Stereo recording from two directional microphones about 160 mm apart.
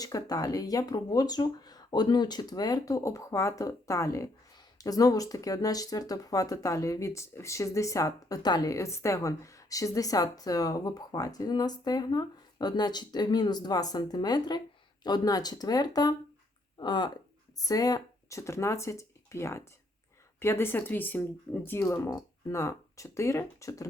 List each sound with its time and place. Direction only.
0.0 s speech: 25° left (ahead or behind)